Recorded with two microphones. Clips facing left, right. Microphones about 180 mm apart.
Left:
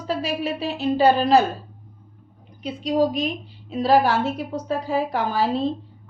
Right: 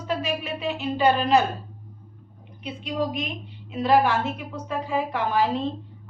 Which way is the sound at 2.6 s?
35° left (ahead or behind).